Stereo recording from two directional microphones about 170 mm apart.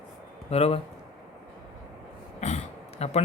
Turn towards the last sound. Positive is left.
turn(degrees=40)  # may be behind; listen again after turning